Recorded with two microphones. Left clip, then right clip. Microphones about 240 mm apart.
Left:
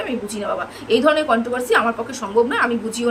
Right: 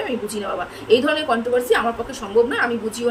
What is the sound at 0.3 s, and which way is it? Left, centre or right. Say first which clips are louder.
A woman's voice: left 1 dB; centre.